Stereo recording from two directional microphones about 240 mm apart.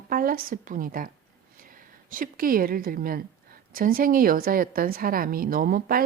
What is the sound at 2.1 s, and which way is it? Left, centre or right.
A woman's voice, right.